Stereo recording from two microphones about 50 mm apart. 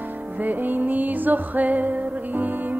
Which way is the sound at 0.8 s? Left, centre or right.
Right.